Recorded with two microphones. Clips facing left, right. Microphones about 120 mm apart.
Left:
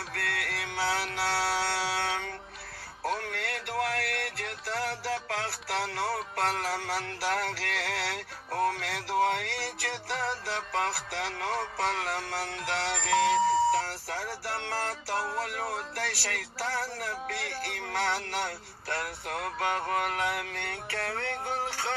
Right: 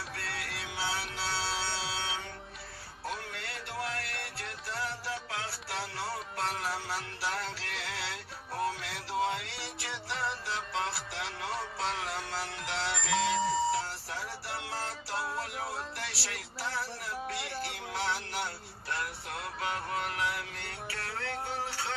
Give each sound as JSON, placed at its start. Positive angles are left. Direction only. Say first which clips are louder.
{"t": 0.1, "sound": "music", "louder": "left 5 dB", "side_deg": 65}
{"t": 17.9, "sound": "speech", "louder": "left 4 dB", "side_deg": 60}